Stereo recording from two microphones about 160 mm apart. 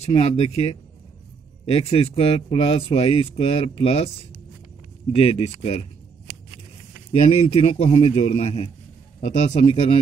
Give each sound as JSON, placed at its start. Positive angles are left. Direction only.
{"t": 0.0, "sound": "speech", "side_deg": 40}
{"t": 5.1, "sound": "speech", "side_deg": 40}
{"t": 7.1, "sound": "speech", "side_deg": 40}